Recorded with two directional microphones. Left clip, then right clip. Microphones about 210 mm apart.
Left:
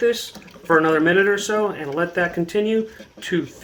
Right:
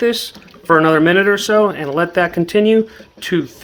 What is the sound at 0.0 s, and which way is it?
Speech, 40° right (ahead or behind).